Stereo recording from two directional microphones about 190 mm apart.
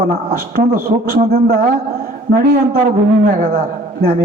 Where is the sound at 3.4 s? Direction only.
50° right (ahead or behind).